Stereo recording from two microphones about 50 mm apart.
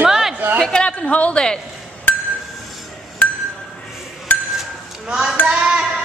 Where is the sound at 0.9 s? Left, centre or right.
Left.